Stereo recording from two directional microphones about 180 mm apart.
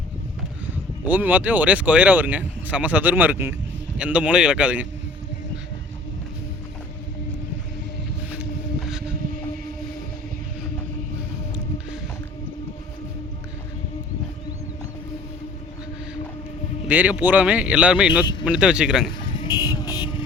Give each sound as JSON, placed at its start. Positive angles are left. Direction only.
{"t": 1.0, "sound": "speech", "side_deg": -10}
{"t": 8.9, "sound": "vehicle", "side_deg": -5}
{"t": 16.9, "sound": "speech", "side_deg": -10}
{"t": 19.3, "sound": "vehicle", "side_deg": 25}